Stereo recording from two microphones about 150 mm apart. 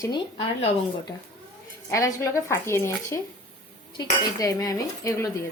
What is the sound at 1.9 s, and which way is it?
A woman's voice, 20° left (ahead or behind).